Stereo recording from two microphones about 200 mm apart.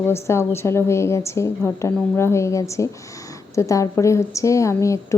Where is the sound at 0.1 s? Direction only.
15° left (ahead or behind).